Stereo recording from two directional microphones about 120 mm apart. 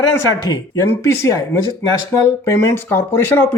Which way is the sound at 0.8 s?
25° left (ahead or behind).